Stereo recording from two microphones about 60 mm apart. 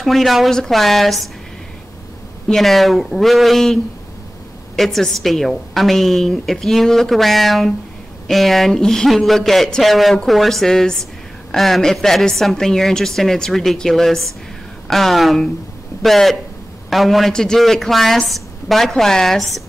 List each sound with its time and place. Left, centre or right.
0.0 s a woman's voice: centre
2.4 s a woman's voice: centre